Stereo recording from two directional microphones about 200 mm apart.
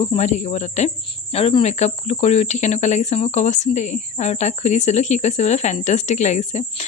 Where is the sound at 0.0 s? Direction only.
35° left (ahead or behind).